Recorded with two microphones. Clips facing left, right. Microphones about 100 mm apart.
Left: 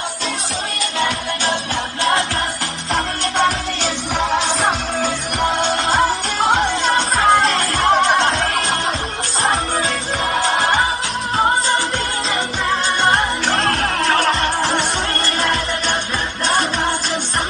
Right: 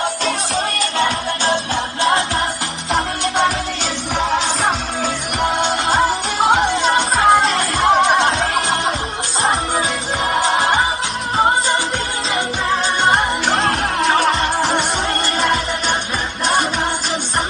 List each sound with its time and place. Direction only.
0.9 s music: 35° right (ahead or behind)
2.9 s music: centre (ahead or behind)
13.0 s music: centre (ahead or behind)